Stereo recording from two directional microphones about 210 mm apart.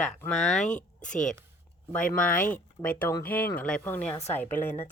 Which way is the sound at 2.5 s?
5° left (ahead or behind).